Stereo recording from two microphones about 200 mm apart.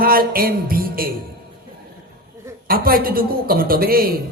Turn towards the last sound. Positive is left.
turn(degrees=-50)  # may be behind; listen again after turning